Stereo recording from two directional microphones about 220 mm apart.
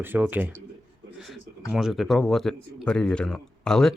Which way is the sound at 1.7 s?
Centre (ahead or behind).